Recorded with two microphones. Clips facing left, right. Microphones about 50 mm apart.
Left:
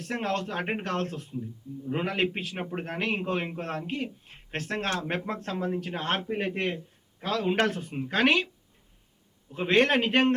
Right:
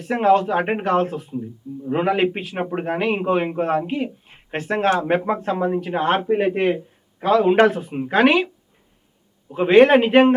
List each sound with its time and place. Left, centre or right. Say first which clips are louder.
0.0 s a man's voice: right 13 dB; centre
9.5 s speech: right 11 dB; centre